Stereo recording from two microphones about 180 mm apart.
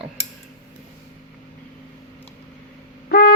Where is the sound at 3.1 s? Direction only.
55° left (ahead or behind).